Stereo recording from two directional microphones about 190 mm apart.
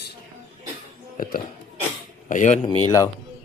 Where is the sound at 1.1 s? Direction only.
45° left (ahead or behind).